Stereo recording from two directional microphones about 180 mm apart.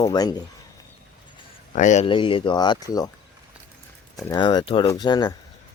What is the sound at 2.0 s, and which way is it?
Speech, 30° left (ahead or behind).